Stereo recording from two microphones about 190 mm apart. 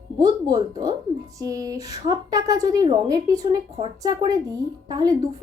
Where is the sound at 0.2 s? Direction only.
20° right (ahead or behind).